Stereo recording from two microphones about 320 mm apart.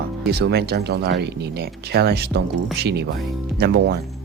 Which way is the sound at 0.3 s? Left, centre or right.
Right.